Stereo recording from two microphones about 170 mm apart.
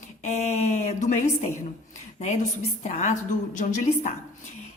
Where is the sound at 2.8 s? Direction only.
45° left (ahead or behind).